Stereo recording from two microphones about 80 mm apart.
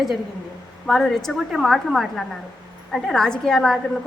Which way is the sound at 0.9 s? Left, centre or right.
Centre.